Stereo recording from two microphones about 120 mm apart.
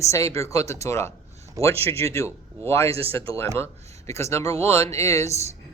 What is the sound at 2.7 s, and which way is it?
Speech, 55° right (ahead or behind).